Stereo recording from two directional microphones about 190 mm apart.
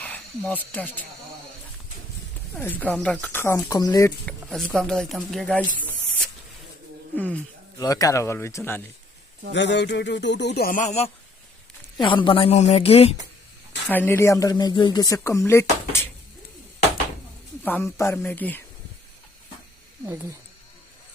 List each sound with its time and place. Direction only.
0.0 s snake: 10° left (ahead or behind)
0.7 s speech: 10° left (ahead or behind)
2.6 s speech: 10° left (ahead or behind)
4.3 s speech: 5° left (ahead or behind)
7.8 s speech: 20° left (ahead or behind)
9.5 s speech: 65° left (ahead or behind); by 11.1 s 35° left (ahead or behind)
11.9 s a woman's voice: 25° left (ahead or behind)
13.8 s speech: 10° left (ahead or behind)
17.6 s speech: 10° left (ahead or behind)